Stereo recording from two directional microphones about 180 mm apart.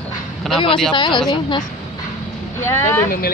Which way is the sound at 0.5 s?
25° left (ahead or behind).